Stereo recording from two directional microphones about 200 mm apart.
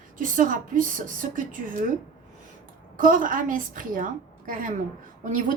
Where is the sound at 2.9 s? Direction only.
40° right (ahead or behind).